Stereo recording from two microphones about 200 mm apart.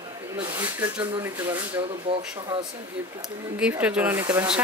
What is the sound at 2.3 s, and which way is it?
Speech, 25° right (ahead or behind).